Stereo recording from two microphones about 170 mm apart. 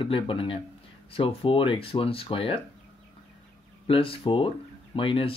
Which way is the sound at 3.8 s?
30° left (ahead or behind).